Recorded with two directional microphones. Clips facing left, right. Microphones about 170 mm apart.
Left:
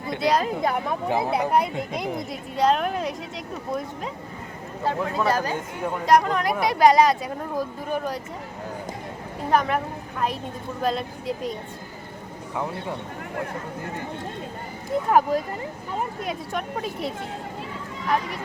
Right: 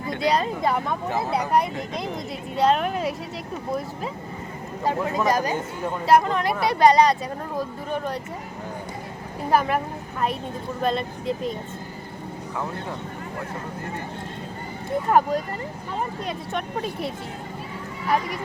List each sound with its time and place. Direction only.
0.2 s speech: 5° left (ahead or behind)
4.8 s speech: 15° right (ahead or behind)
6.1 s speech: centre (ahead or behind)
9.5 s a woman's voice: 5° right (ahead or behind)
15.1 s speech: 5° left (ahead or behind)
18.0 s speech: 10° right (ahead or behind)